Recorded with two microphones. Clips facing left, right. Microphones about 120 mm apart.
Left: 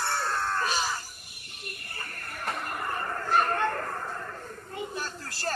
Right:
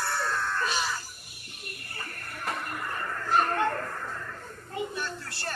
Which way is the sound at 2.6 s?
35° left (ahead or behind).